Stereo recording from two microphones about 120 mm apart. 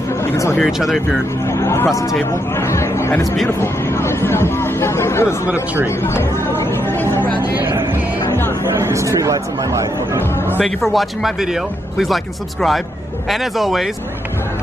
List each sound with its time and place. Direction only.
0.2 s a sound: 25° left (ahead or behind)
0.6 s speech: centre (ahead or behind)
1.4 s speech: 25° left (ahead or behind)
5.9 s chatter: 20° left (ahead or behind)
7.5 s music: 20° right (ahead or behind)
8.3 s music: 20° left (ahead or behind)
8.7 s speech: 25° right (ahead or behind)
10.3 s speech: 15° left (ahead or behind)
10.6 s speech: centre (ahead or behind)